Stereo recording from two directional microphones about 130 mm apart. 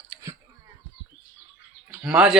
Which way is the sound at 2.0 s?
5° right (ahead or behind).